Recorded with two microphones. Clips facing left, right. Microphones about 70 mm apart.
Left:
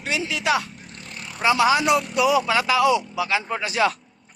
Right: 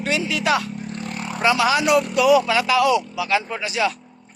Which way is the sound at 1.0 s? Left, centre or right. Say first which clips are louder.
Right 7 dB; right.